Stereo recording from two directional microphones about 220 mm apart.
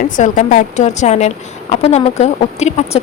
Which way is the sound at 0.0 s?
35° left (ahead or behind).